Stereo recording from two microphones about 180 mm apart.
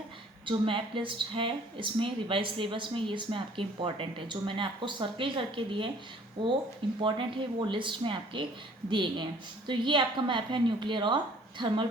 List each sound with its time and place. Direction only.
0.4 s speech: 30° right (ahead or behind)
7.0 s speech: 25° right (ahead or behind)